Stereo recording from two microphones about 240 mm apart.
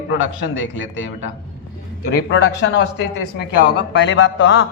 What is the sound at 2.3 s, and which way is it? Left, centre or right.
Speech, left.